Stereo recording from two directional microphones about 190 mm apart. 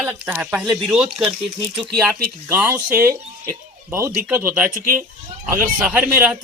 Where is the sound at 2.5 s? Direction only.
10° right (ahead or behind).